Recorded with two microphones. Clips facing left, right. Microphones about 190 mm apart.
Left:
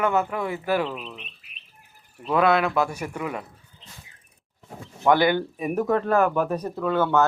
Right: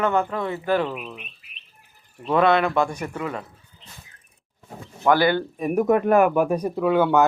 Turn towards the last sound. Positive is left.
turn(degrees=-15)  # may be behind; listen again after turning